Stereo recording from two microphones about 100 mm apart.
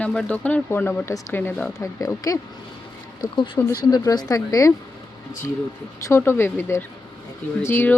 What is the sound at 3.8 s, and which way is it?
Speech, 40° left (ahead or behind).